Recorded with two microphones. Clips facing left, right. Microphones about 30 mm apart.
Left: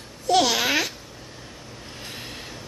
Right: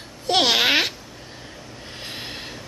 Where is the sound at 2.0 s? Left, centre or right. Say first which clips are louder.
Right 4 dB; right.